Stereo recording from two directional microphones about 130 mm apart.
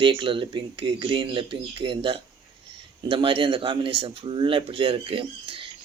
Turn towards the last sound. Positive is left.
turn(degrees=-45)  # may be behind; listen again after turning